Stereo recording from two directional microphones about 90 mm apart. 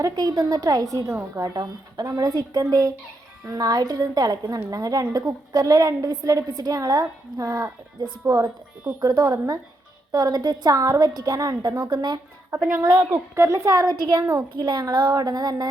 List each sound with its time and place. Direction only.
0.0 s a woman's voice: 45° right (ahead or behind)
8.3 s speech: 30° right (ahead or behind)
9.0 s a woman's voice: 45° right (ahead or behind)
13.0 s a woman's voice: 20° right (ahead or behind)
13.3 s a woman's voice: 35° right (ahead or behind)